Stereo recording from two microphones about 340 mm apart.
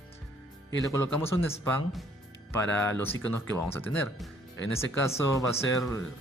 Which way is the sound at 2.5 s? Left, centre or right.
Centre.